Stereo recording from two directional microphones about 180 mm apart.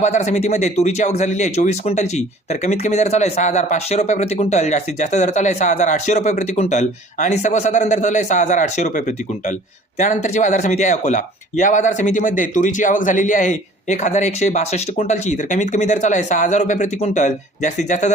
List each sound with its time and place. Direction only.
0.0 s speech: 40° left (ahead or behind)